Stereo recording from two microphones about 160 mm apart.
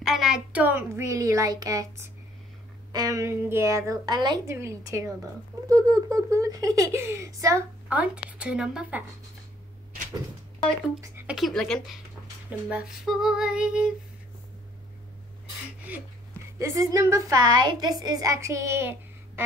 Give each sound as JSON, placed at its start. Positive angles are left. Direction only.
{"t": 0.0, "sound": "a child's voice", "side_deg": 0}
{"t": 7.9, "sound": "speech", "side_deg": -5}
{"t": 11.0, "sound": "speech", "side_deg": -15}
{"t": 11.3, "sound": "a sound", "side_deg": 0}
{"t": 15.9, "sound": "speech", "side_deg": -10}
{"t": 16.5, "sound": "a woman's voice", "side_deg": -20}